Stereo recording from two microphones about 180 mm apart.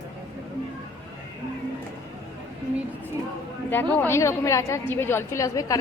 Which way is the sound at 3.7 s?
10° left (ahead or behind).